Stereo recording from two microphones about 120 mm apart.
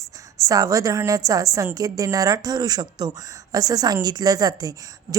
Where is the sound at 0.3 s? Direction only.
30° right (ahead or behind).